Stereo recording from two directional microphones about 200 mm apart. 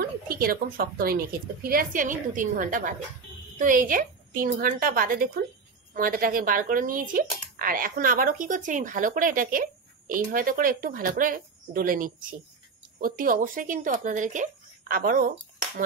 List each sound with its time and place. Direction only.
0.3 s speech: 50° right (ahead or behind)